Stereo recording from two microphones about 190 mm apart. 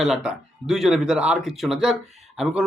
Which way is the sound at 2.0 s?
35° right (ahead or behind).